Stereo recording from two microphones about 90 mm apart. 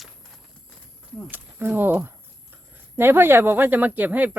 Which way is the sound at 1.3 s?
25° right (ahead or behind).